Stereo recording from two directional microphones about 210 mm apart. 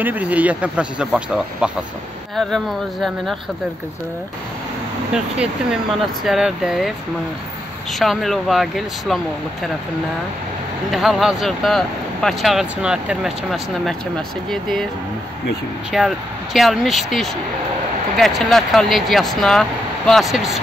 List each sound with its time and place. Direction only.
0.0 s speech: 10° right (ahead or behind)
5.1 s speech: 5° right (ahead or behind)
8.0 s speech: centre (ahead or behind)
10.9 s speech: centre (ahead or behind)
15.9 s speech: centre (ahead or behind)